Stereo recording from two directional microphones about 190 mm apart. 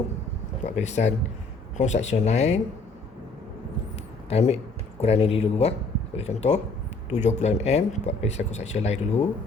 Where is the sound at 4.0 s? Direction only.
35° left (ahead or behind).